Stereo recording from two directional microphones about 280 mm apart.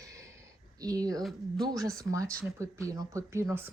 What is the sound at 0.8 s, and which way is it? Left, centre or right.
Speech, centre.